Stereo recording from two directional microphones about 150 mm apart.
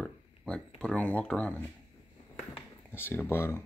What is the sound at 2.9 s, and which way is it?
Speech, 15° left (ahead or behind).